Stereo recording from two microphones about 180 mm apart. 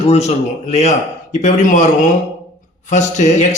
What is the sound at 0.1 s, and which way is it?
Speech, 35° left (ahead or behind).